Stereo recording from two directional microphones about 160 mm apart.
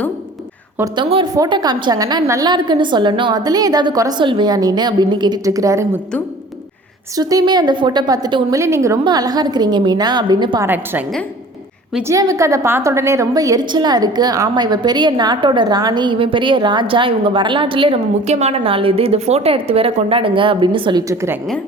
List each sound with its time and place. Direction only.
0.9 s a woman's voice: 30° right (ahead or behind)
7.2 s a woman's voice: 25° right (ahead or behind)
10.6 s a woman's voice: 10° right (ahead or behind)
12.0 s a woman's voice: 20° right (ahead or behind)
21.1 s a woman's voice: 20° right (ahead or behind)